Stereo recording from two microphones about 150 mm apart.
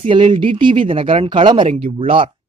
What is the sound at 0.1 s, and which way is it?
Speech, 35° right (ahead or behind).